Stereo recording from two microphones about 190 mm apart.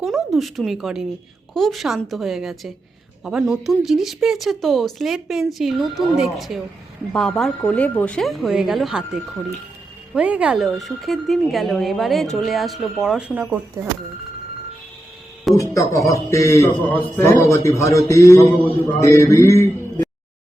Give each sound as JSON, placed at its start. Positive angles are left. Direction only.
{"t": 0.0, "sound": "speech", "side_deg": 0}
{"t": 15.5, "sound": "a man's voice", "side_deg": 15}